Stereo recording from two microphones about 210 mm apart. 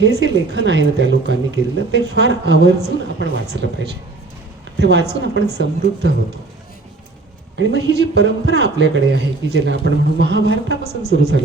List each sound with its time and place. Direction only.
0.0 s speech: 55° right (ahead or behind)
4.8 s a man's voice: 55° right (ahead or behind)
7.5 s a man's voice: 55° right (ahead or behind)